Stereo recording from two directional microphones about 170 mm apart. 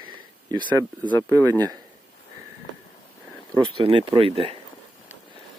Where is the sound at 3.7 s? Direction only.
30° right (ahead or behind).